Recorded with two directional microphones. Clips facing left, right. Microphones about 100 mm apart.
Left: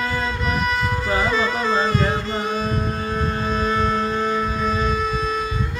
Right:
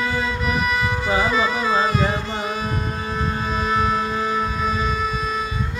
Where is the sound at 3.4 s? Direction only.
5° right (ahead or behind).